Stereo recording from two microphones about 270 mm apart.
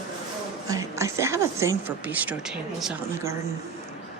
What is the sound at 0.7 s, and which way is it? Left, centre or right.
A woman's voice, centre.